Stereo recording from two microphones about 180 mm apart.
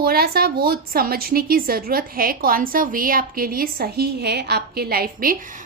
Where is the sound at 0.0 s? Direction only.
60° right (ahead or behind).